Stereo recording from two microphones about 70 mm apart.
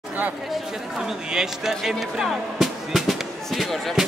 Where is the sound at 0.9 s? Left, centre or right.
Centre.